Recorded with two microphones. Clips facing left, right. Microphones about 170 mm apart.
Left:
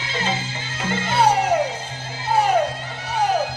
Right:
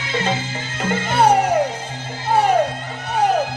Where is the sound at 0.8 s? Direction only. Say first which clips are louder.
Right 3 dB; 50° right (ahead or behind).